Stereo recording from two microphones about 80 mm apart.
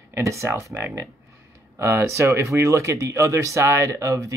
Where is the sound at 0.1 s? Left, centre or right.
Right.